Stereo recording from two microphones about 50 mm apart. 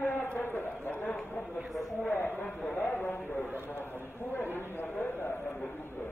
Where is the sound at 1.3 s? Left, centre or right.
Centre.